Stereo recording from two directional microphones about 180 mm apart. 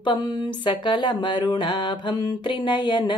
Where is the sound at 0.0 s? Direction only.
25° left (ahead or behind).